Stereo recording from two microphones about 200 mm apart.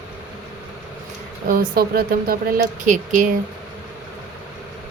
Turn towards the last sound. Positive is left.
turn(degrees=-40)  # may be behind; listen again after turning